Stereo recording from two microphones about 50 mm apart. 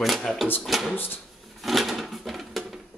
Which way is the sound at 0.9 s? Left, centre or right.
Left.